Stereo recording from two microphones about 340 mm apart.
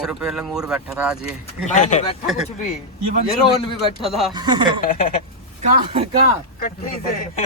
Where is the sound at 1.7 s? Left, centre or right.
Left.